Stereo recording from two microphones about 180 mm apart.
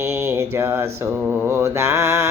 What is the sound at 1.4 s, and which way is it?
Speech, 15° right (ahead or behind).